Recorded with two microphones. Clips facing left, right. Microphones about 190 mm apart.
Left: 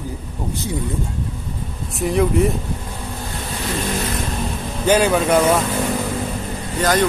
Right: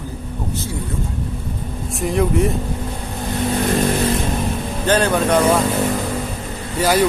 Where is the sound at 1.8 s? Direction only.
Centre (ahead or behind).